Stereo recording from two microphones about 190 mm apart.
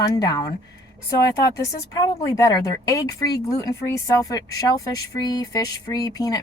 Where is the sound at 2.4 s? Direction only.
20° left (ahead or behind).